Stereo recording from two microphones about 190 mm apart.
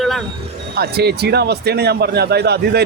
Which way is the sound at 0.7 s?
55° right (ahead or behind).